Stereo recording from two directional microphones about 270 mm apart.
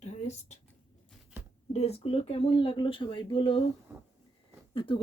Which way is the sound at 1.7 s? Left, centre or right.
Left.